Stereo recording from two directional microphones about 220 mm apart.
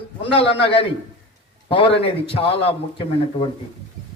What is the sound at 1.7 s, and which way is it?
A man's voice, 25° left (ahead or behind).